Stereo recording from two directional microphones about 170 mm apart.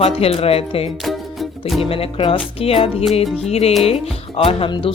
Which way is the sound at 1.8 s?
35° left (ahead or behind).